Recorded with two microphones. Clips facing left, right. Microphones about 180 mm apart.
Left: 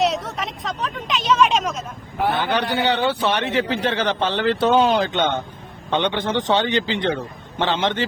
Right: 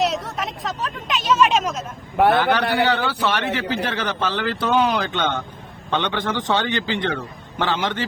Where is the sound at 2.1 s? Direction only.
65° right (ahead or behind).